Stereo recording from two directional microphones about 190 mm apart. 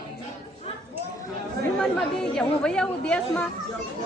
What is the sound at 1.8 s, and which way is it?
A woman's voice, 5° left (ahead or behind).